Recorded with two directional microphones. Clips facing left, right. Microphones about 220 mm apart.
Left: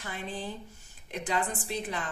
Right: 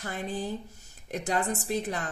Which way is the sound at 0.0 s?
45° right (ahead or behind).